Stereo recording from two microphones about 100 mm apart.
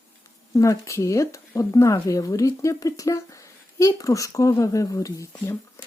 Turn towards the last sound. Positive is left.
turn(degrees=35)  # may be behind; listen again after turning